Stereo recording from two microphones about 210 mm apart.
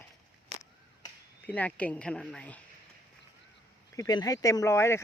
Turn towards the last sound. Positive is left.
turn(degrees=10)  # may be behind; listen again after turning